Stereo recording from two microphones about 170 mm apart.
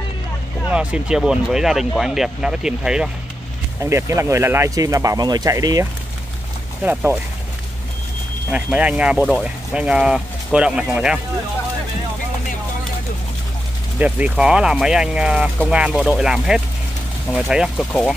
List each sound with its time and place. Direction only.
0.7 s speech: 5° right (ahead or behind)
3.8 s speech: 15° right (ahead or behind)
6.8 s speech: 10° right (ahead or behind)
8.5 s speech: 5° right (ahead or behind)
13.9 s speech: 10° right (ahead or behind)